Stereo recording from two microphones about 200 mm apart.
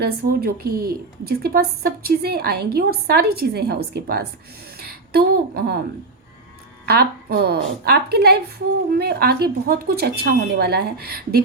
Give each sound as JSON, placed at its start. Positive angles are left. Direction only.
{"t": 0.0, "sound": "a woman's voice", "side_deg": -50}
{"t": 6.8, "sound": "a woman's voice", "side_deg": -50}